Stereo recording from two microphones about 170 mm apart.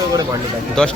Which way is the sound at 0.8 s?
5° left (ahead or behind).